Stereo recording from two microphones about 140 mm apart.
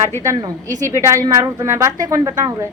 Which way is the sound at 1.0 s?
20° right (ahead or behind).